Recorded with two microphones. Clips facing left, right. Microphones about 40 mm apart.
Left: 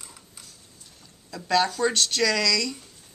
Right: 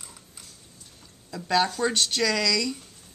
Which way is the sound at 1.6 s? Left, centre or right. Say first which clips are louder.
Left 2 dB; centre.